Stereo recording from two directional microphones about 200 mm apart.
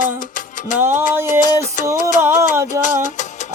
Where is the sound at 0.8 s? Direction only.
10° right (ahead or behind).